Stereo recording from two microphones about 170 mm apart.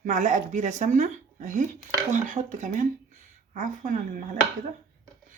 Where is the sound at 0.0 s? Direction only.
45° right (ahead or behind).